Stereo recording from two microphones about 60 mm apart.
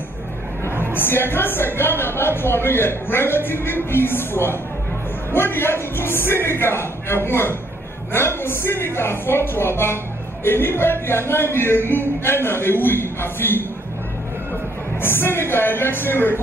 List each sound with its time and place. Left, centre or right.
0.7 s a sound: right
0.9 s a woman's voice: left
15.0 s a woman's voice: left